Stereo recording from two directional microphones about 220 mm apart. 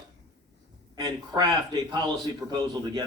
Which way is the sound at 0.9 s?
20° right (ahead or behind).